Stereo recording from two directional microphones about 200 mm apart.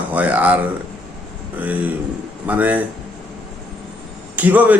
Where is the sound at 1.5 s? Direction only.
10° right (ahead or behind).